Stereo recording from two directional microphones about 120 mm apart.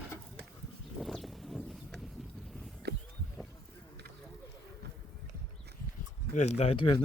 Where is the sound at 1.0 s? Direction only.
Centre (ahead or behind).